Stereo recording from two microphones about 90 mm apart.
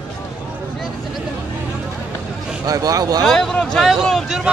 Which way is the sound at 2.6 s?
45° right (ahead or behind).